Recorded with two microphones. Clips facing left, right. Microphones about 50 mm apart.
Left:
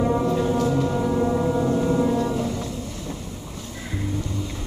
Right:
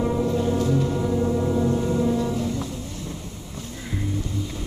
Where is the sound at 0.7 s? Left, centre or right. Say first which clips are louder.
Left 1 dB; centre.